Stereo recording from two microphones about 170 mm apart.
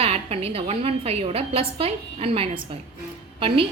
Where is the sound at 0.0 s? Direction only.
35° right (ahead or behind).